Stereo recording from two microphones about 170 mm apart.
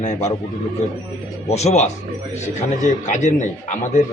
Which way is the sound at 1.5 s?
40° left (ahead or behind).